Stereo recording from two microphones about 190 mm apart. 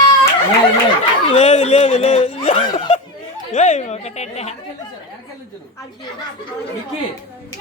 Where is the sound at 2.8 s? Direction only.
30° left (ahead or behind).